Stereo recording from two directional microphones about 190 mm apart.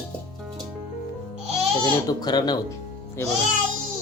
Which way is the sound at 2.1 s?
20° left (ahead or behind).